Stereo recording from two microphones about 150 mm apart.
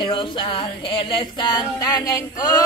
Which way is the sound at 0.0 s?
35° left (ahead or behind).